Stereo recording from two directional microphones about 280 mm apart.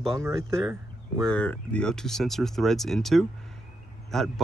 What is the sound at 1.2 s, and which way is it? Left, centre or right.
Speech, centre.